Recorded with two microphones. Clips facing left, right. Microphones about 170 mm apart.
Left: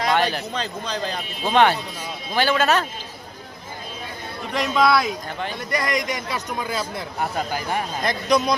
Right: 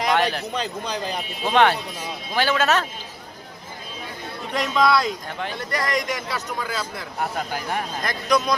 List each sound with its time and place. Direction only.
0.2 s speech: centre (ahead or behind)
0.5 s a man's voice: 15° right (ahead or behind)
1.5 s speech: centre (ahead or behind)
4.5 s speech: 5° left (ahead or behind); by 7.0 s 20° left (ahead or behind)
7.2 s speech: centre (ahead or behind)
8.0 s speech: 20° left (ahead or behind)